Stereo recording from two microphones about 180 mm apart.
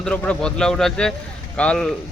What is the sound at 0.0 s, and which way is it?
Speech, 5° left (ahead or behind).